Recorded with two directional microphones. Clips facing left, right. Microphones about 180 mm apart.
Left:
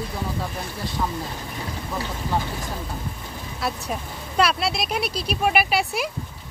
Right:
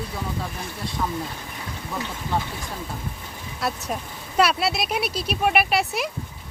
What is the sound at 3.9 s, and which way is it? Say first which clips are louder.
Speech: even; 5° right (ahead or behind).